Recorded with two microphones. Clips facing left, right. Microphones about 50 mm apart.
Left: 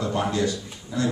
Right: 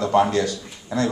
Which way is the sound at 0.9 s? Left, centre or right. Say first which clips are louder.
Right 4 dB; right.